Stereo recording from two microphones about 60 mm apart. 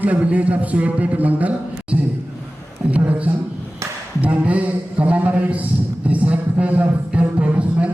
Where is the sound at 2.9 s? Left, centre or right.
Right.